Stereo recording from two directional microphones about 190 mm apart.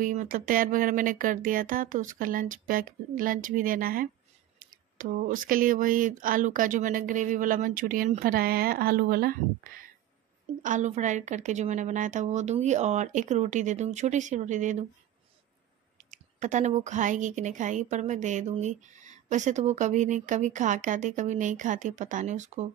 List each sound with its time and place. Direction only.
0.0 s a woman's voice: 45° right (ahead or behind)
16.1 s a woman's voice: 40° right (ahead or behind)